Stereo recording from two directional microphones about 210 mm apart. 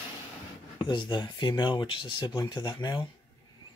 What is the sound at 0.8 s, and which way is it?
Speech, 20° left (ahead or behind).